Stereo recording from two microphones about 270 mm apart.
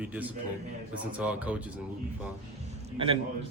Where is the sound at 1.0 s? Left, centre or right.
Centre.